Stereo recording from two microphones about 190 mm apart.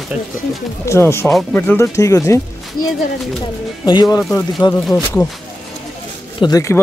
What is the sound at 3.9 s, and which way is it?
Speech, 20° left (ahead or behind).